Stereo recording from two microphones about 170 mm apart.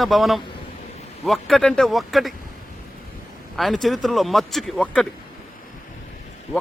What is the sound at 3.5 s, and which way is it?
A man's voice, centre (ahead or behind).